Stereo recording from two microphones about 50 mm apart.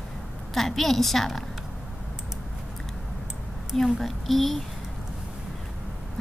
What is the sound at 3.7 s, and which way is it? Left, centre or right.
Speech, centre.